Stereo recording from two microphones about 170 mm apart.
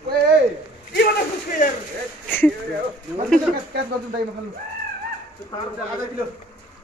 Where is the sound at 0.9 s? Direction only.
70° left (ahead or behind).